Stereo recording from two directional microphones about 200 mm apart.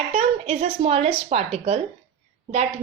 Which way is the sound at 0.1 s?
30° right (ahead or behind).